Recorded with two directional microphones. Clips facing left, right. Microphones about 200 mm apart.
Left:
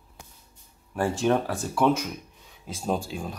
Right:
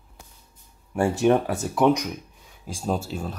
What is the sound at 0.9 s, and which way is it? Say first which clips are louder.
Speech: right 4 dB; 15° right (ahead or behind).